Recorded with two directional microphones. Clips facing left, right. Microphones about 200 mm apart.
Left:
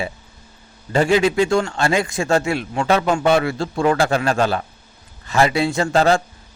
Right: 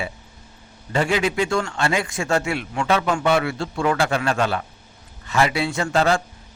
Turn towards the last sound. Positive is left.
turn(degrees=35)  # may be behind; listen again after turning